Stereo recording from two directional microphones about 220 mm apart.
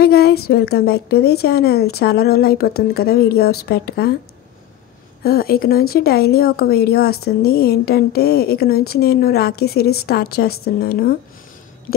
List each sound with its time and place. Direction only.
0.0 s a woman's voice: 45° left (ahead or behind)
5.2 s a woman's voice: 45° left (ahead or behind)